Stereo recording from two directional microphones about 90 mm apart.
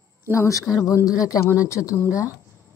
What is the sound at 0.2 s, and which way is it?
Speech, 35° left (ahead or behind).